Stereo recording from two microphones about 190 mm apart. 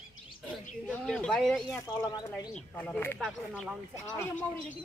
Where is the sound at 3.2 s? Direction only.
5° right (ahead or behind).